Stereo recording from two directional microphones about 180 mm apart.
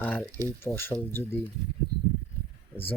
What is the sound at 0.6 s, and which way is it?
Speech, 15° left (ahead or behind).